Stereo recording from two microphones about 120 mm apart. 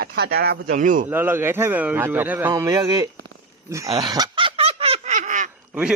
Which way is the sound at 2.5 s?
30° right (ahead or behind).